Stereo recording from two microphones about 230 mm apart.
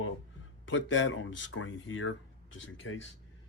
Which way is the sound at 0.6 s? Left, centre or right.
Left.